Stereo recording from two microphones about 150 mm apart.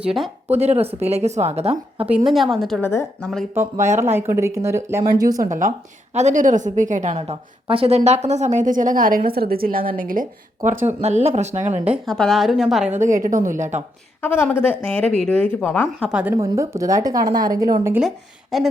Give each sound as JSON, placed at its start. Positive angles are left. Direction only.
{"t": 0.5, "sound": "speech", "side_deg": -45}
{"t": 2.3, "sound": "a woman's voice", "side_deg": 0}
{"t": 2.8, "sound": "speech", "side_deg": 15}
{"t": 4.0, "sound": "speech", "side_deg": -15}
{"t": 5.4, "sound": "a woman's voice", "side_deg": -65}
{"t": 12.0, "sound": "a woman's voice", "side_deg": 5}
{"t": 13.0, "sound": "a woman's voice", "side_deg": -60}
{"t": 14.2, "sound": "speech", "side_deg": 15}
{"t": 16.0, "sound": "speech", "side_deg": -5}
{"t": 16.3, "sound": "speech", "side_deg": -20}
{"t": 18.5, "sound": "a woman's voice", "side_deg": 0}